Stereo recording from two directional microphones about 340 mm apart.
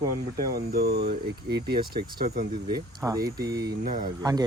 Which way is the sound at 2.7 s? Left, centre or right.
Centre.